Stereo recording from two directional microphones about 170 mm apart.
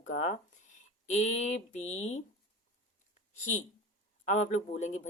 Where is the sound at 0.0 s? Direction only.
45° left (ahead or behind).